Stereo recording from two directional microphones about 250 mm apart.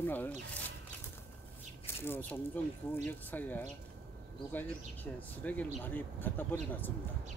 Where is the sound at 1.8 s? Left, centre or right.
Centre.